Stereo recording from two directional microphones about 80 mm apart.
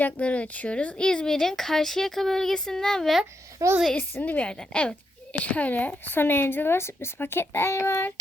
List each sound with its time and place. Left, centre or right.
0.0 s speech: centre
3.6 s a woman's voice: right
3.9 s a woman's voice: centre